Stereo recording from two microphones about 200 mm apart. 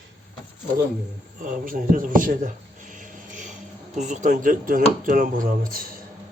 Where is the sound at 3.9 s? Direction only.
35° right (ahead or behind).